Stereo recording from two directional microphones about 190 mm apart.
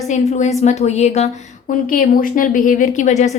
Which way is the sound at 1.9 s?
50° left (ahead or behind).